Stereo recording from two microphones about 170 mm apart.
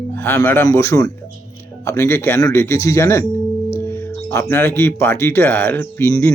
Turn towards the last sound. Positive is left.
turn(degrees=15)  # may be behind; listen again after turning